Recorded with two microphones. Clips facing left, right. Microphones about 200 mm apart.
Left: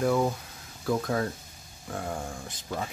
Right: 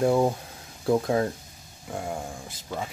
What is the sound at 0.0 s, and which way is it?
Speech, 25° right (ahead or behind).